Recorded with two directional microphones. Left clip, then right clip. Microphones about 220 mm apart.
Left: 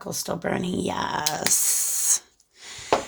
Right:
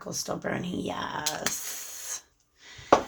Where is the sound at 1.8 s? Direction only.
45° left (ahead or behind).